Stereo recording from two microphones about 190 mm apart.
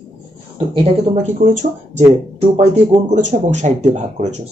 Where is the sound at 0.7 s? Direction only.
35° right (ahead or behind).